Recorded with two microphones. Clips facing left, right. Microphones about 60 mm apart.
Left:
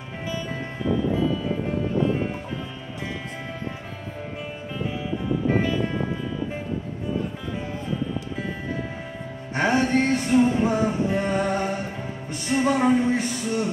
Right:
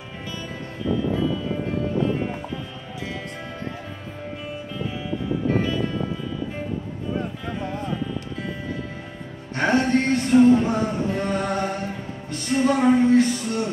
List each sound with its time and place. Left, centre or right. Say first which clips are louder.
9.5 s music: right 1 dB; centre